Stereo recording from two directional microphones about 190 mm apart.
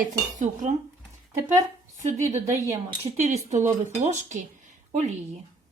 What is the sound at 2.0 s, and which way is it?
Speech, 40° right (ahead or behind).